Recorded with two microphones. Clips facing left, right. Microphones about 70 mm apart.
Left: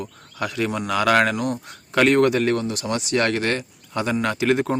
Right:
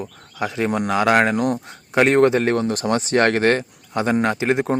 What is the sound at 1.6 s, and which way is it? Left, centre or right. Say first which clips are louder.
A man's voice: left 2 dB; right.